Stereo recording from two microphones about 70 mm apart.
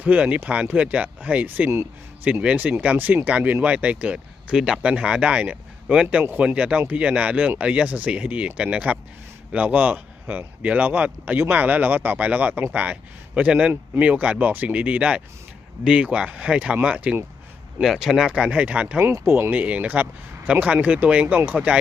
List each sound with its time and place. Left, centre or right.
0.0 s speech: centre
17.7 s speech: centre
18.3 s speech: centre
19.2 s speech: right
19.5 s speech: centre